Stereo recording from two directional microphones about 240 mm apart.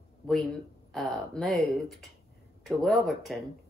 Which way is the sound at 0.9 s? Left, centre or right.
Centre.